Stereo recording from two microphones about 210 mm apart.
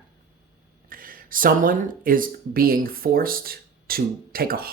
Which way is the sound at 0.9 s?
40° right (ahead or behind).